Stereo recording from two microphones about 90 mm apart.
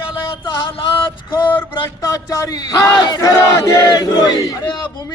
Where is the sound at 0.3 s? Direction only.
65° left (ahead or behind).